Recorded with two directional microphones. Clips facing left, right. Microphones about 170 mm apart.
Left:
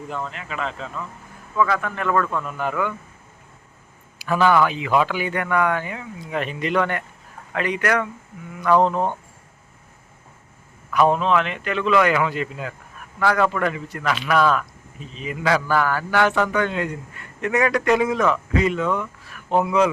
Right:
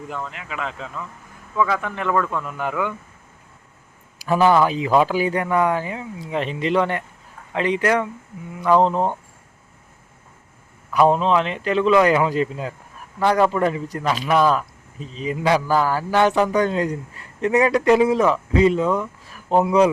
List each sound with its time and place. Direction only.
0.3 s speech: 10° right (ahead or behind)
4.3 s speech: 25° right (ahead or behind)
11.0 s speech: 30° right (ahead or behind)
14.3 s speech: 20° right (ahead or behind)
14.5 s speech: 35° right (ahead or behind)
16.5 s a man's voice: 35° right (ahead or behind)